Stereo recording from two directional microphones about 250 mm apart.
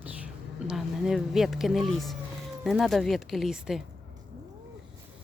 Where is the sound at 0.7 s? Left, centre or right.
Centre.